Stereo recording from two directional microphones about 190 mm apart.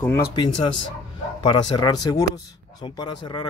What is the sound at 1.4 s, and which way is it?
Speech, 25° left (ahead or behind).